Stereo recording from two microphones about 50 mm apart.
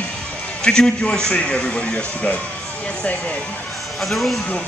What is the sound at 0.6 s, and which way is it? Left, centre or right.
Speech, centre.